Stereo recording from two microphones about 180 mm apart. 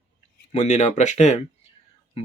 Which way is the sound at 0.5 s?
40° left (ahead or behind).